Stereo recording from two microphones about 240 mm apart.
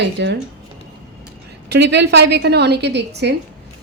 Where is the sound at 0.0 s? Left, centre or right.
Right.